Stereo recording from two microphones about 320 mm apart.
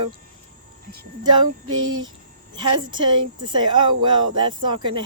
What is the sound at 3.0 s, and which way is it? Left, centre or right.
Speech, centre.